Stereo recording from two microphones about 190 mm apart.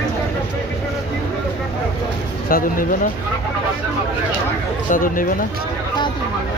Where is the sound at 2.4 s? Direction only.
50° left (ahead or behind).